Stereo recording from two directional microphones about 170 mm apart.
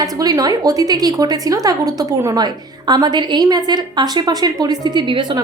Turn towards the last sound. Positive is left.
turn(degrees=-25)  # may be behind; listen again after turning